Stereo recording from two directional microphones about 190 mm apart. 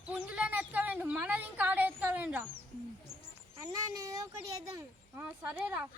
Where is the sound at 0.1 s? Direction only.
5° right (ahead or behind).